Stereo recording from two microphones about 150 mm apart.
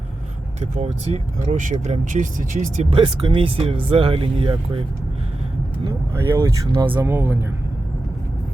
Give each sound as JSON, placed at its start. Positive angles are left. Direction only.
{"t": 0.6, "sound": "speech", "side_deg": -50}
{"t": 2.9, "sound": "speech", "side_deg": -35}
{"t": 6.1, "sound": "speech", "side_deg": -20}